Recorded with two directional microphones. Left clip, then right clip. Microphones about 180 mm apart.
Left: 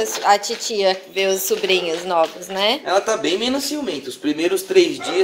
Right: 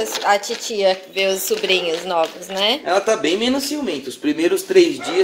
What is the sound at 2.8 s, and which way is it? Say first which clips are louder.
Speech: right 1 dB; 35° right (ahead or behind).